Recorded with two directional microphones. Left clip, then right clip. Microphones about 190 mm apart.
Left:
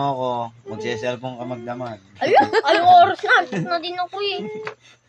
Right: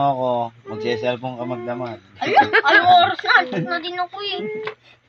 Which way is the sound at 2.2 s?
45° left (ahead or behind).